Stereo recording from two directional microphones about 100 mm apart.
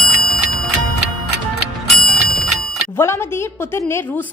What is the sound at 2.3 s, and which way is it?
Bicycle bell, centre (ahead or behind).